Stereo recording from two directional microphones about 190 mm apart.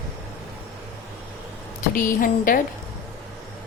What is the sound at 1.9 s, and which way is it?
Speech, 45° left (ahead or behind).